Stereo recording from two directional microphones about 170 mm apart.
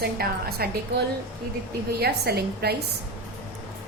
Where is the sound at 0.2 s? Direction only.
70° right (ahead or behind).